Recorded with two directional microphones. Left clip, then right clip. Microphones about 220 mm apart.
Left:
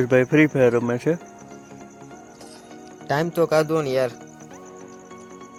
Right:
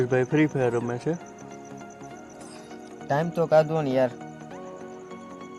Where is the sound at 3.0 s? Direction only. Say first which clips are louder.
Left 3 dB; 35° left (ahead or behind).